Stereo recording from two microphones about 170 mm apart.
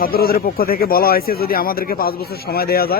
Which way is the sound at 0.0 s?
60° left (ahead or behind).